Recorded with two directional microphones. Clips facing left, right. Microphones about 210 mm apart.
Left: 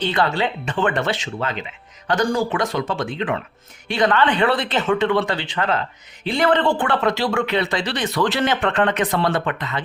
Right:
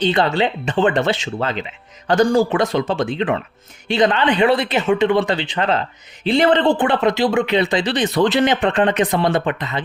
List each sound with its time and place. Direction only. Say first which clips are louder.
0.0 s speech: right 4 dB; 25° right (ahead or behind)